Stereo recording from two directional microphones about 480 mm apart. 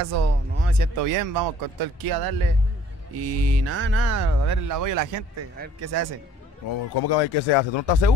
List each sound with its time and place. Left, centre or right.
0.0 s speech: right
3.2 s speech: right
6.7 s speech: left